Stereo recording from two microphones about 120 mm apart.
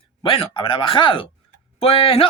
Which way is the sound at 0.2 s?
45° left (ahead or behind).